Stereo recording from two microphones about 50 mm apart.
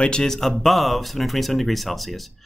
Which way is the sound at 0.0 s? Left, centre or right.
Centre.